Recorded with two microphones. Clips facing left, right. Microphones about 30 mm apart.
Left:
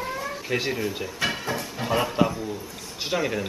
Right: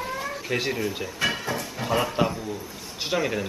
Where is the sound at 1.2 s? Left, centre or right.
Centre.